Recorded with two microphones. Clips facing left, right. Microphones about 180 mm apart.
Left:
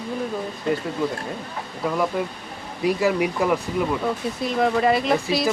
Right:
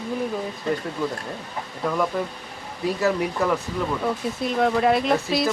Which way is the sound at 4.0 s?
Centre (ahead or behind).